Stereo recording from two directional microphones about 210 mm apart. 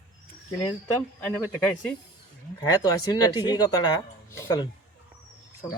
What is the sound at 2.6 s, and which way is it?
Speech, 20° left (ahead or behind).